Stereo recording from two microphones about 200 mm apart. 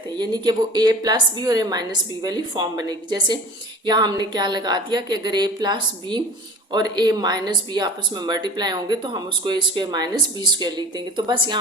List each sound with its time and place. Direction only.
0.2 s speech: 20° right (ahead or behind)